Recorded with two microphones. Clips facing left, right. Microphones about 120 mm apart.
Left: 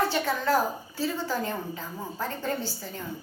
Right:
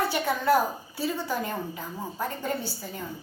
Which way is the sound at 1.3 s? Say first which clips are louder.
Even; 15° right (ahead or behind).